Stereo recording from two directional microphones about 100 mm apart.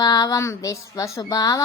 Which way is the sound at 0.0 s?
40° left (ahead or behind).